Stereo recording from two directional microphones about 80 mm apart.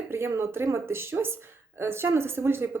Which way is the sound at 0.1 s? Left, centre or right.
Right.